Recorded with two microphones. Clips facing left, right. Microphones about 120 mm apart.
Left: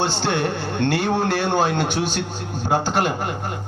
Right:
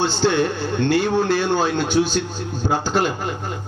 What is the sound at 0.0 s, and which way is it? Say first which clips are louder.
A man's voice: right 3 dB; 65° left (ahead or behind).